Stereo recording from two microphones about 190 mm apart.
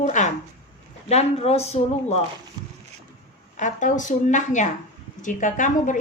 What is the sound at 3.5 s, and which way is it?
A woman's voice, 40° left (ahead or behind).